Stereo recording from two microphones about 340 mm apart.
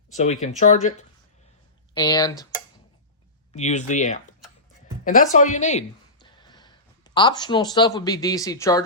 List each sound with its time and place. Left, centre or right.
0.2 s speech: centre
1.9 s speech: centre
3.5 s speech: centre